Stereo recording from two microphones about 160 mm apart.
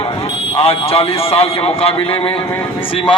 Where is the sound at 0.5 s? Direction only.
35° left (ahead or behind).